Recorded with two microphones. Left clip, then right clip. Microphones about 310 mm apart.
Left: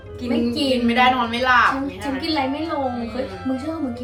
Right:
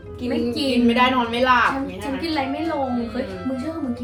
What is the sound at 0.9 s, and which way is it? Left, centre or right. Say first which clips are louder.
Speech: left 2 dB; centre.